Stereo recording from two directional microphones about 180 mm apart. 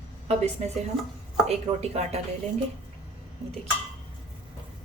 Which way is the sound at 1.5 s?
35° right (ahead or behind).